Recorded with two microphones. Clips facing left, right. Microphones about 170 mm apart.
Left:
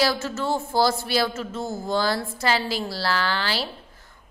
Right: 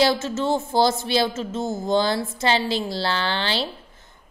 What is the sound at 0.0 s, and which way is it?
A woman's voice, 20° right (ahead or behind).